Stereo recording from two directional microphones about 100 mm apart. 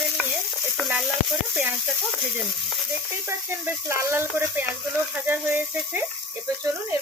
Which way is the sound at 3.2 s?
25° right (ahead or behind).